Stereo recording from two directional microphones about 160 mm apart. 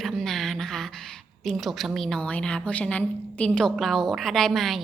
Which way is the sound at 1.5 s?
Centre (ahead or behind).